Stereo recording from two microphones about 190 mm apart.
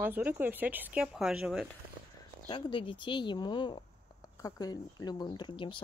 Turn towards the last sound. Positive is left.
turn(degrees=25)  # may be behind; listen again after turning